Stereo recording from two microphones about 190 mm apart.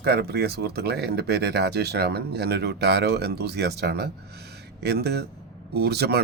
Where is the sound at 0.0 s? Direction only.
60° right (ahead or behind).